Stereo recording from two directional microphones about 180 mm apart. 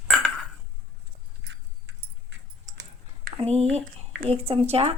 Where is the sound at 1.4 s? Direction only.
80° right.